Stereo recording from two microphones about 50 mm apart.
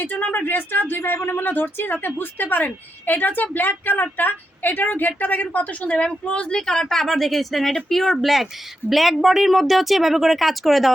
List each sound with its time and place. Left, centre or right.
0.0 s a woman's voice: left; by 10.9 s centre